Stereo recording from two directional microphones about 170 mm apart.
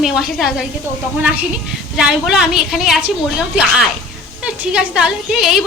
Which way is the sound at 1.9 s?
5° right (ahead or behind).